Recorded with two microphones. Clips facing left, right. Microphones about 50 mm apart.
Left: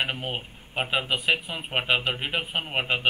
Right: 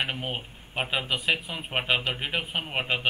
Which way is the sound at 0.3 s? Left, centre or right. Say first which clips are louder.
Left 1 dB; centre.